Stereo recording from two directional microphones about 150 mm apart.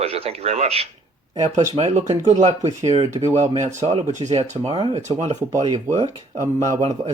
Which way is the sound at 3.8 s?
40° right (ahead or behind).